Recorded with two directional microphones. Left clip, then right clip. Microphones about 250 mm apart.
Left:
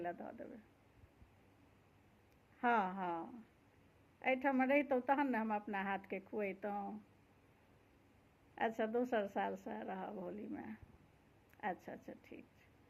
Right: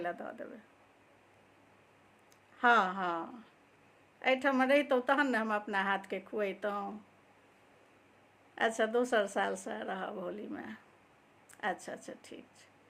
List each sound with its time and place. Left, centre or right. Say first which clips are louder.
0.0 s a woman's voice: right 6 dB; centre
2.6 s a woman's voice: right 9 dB; centre
8.5 s a woman's voice: right 7 dB; centre